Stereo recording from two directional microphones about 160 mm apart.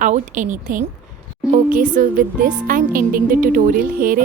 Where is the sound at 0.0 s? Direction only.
50° right (ahead or behind).